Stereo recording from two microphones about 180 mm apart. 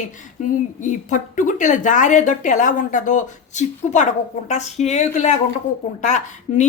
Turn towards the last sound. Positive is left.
turn(degrees=40)  # may be behind; listen again after turning